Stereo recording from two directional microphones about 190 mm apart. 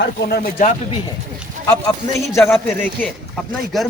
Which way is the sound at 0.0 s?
55° left (ahead or behind).